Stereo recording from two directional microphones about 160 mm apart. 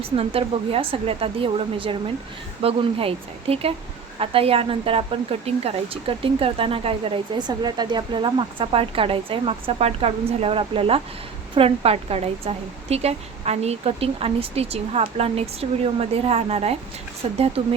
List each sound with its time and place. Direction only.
0.0 s speech: 35° right (ahead or behind)